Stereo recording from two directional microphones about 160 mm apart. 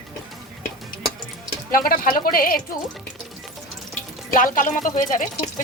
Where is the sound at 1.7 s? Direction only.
65° left (ahead or behind).